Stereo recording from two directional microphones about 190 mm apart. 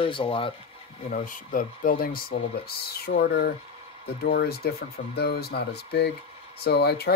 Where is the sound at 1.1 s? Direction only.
45° left (ahead or behind).